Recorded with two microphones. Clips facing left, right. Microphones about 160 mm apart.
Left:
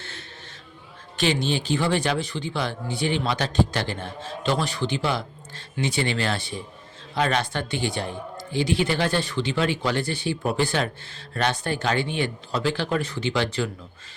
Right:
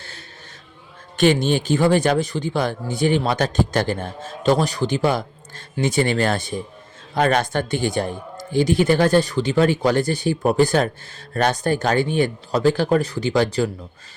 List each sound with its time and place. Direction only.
1.1 s speech: 50° right (ahead or behind)